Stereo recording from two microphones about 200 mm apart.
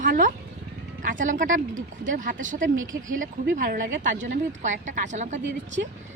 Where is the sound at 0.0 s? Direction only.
40° right (ahead or behind).